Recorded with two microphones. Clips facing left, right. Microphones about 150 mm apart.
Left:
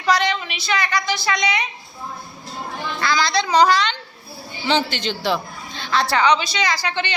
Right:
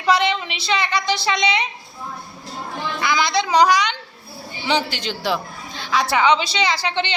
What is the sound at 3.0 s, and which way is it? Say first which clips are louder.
A woman's voice: even; 20° right (ahead or behind).